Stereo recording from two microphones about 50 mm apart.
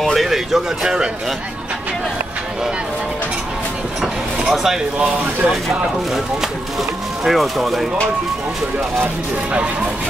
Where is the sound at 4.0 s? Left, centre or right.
Centre.